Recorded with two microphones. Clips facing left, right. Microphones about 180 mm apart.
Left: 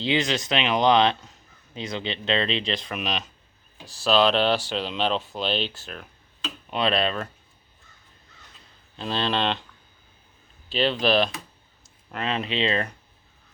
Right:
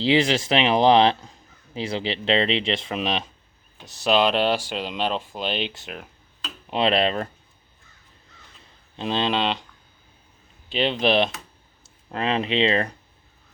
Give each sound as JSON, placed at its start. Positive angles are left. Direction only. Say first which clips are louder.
{"t": 0.0, "sound": "speech", "louder": "right 5 dB", "side_deg": -30}
{"t": 9.0, "sound": "speech", "louder": "right 2 dB", "side_deg": -20}
{"t": 10.7, "sound": "speech", "louder": "right 1 dB", "side_deg": -20}